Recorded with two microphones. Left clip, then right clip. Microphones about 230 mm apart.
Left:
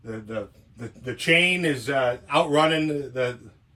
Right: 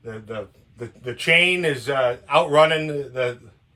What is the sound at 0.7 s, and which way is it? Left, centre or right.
Speech, right.